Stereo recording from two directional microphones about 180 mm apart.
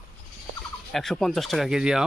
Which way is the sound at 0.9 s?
Centre (ahead or behind).